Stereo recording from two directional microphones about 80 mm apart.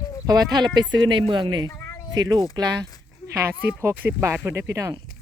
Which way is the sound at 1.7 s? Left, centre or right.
Left.